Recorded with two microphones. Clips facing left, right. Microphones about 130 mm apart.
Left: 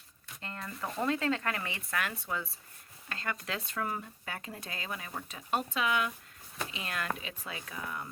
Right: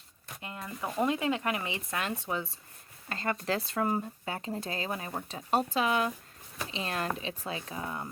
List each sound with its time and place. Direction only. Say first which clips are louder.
0.4 s speech: right 2 dB; 10° right (ahead or behind); by 8.0 s 30° right (ahead or behind)